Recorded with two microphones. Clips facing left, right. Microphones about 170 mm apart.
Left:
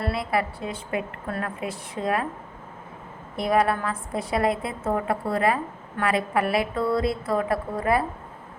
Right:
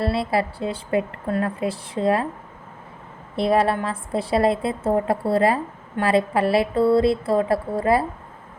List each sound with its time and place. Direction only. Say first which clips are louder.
0.0 s a woman's voice: right 4 dB; 30° right (ahead or behind)
3.3 s a woman's voice: right 3 dB; 30° right (ahead or behind)